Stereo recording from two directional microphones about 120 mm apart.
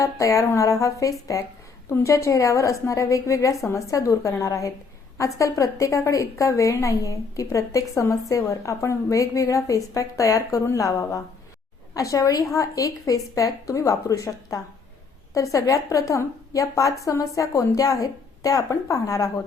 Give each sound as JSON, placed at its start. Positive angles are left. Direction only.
{"t": 0.0, "sound": "a woman's voice", "side_deg": 25}